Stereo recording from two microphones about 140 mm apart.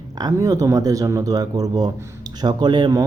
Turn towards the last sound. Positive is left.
turn(degrees=-30)  # may be behind; listen again after turning